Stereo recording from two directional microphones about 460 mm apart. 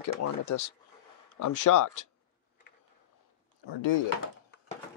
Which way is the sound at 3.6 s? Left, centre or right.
Left.